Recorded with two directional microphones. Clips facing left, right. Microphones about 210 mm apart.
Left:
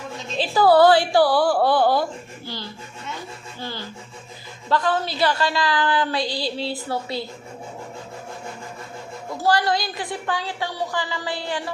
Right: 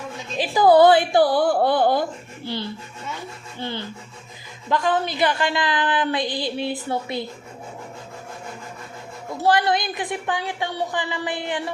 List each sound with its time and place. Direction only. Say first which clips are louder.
0.3 s a woman's voice: right 1 dB; 15° right (ahead or behind)
3.6 s a woman's voice: right 4 dB; 20° right (ahead or behind)
9.4 s a woman's voice: right 1 dB; 20° right (ahead or behind)